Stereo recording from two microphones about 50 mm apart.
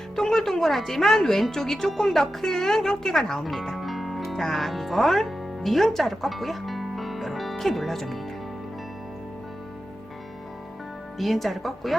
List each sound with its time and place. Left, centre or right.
0.2 s a woman's voice: centre
11.2 s speech: centre